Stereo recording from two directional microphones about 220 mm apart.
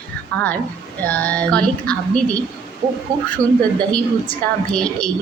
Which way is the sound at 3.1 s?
15° right (ahead or behind).